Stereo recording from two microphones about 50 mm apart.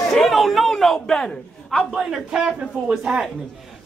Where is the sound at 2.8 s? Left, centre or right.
Right.